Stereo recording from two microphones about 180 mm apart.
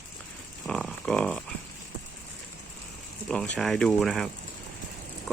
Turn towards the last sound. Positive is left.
turn(degrees=0)  # may be behind; listen again after turning